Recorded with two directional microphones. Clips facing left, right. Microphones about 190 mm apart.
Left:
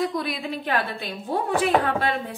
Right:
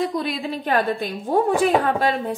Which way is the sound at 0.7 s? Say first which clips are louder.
Right 7 dB; 45° right (ahead or behind).